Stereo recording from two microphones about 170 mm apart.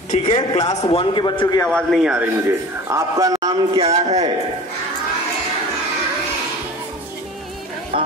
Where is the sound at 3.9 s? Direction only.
40° right (ahead or behind).